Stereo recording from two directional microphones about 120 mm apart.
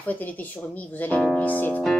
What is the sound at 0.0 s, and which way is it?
Speech, 15° left (ahead or behind).